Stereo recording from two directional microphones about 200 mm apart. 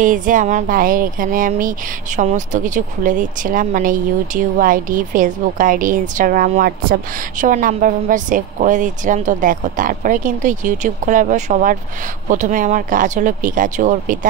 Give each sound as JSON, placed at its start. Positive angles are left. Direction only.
{"t": 0.0, "sound": "speech", "side_deg": -40}